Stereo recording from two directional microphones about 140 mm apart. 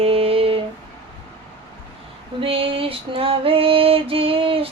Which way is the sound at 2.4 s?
40° right (ahead or behind).